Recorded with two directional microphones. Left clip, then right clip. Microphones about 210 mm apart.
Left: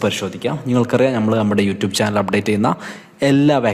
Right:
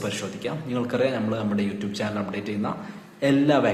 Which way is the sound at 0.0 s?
40° left (ahead or behind).